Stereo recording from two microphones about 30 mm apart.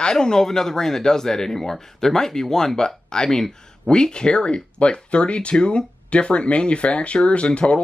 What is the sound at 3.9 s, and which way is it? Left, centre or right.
Speech, left.